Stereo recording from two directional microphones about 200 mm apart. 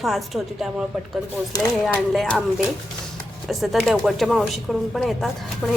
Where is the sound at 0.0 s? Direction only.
Centre (ahead or behind).